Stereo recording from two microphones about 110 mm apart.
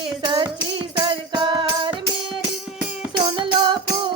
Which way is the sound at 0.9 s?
45° right (ahead or behind).